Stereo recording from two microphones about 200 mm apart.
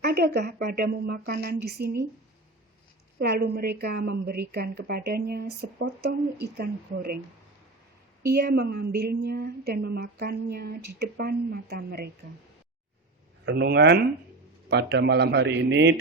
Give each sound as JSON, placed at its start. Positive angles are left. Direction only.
{"t": 0.0, "sound": "a woman's voice", "side_deg": -55}
{"t": 3.2, "sound": "a woman's voice", "side_deg": -55}
{"t": 8.2, "sound": "a woman's voice", "side_deg": -50}
{"t": 13.4, "sound": "a man's voice", "side_deg": -60}